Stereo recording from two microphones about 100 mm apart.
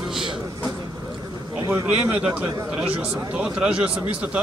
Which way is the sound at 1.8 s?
15° right (ahead or behind).